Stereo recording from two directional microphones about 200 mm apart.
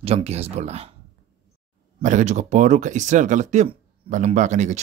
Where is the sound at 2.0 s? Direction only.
35° right (ahead or behind).